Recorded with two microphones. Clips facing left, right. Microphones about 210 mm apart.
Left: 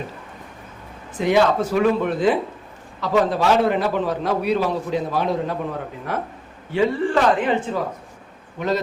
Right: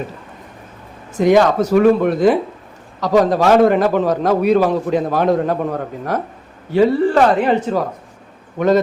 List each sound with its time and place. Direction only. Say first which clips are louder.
1.1 s a man's voice: right 5 dB; 45° right (ahead or behind)
8.5 s speech: right 9 dB; 50° right (ahead or behind)